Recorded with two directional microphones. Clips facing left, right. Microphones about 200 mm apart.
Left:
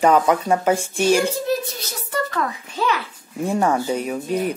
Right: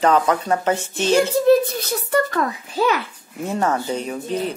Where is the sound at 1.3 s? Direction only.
55° right (ahead or behind).